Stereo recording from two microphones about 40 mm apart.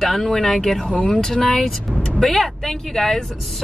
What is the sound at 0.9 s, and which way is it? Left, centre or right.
Speech, left.